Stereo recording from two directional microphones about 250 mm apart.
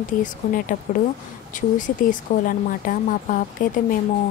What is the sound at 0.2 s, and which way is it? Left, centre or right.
A woman's voice, left.